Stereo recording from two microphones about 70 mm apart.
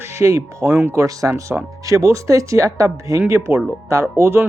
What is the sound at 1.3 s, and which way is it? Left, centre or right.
Speech, right.